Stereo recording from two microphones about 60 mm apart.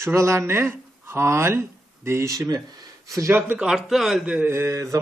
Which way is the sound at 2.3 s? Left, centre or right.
Right.